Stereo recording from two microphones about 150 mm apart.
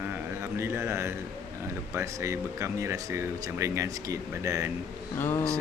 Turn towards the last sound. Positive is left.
turn(degrees=15)  # may be behind; listen again after turning